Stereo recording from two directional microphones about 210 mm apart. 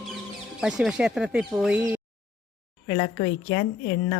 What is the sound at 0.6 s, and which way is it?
Speech, centre (ahead or behind).